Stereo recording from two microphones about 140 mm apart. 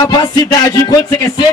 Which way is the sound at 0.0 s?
25° left (ahead or behind).